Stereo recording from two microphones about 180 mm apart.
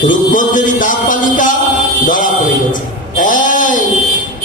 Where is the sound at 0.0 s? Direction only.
45° left (ahead or behind).